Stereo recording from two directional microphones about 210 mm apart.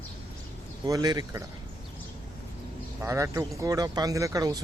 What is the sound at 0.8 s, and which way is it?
Speech, 20° right (ahead or behind).